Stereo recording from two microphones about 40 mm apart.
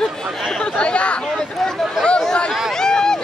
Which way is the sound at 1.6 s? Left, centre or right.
Centre.